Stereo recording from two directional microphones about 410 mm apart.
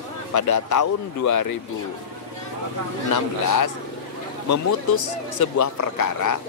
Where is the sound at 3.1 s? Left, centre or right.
Left.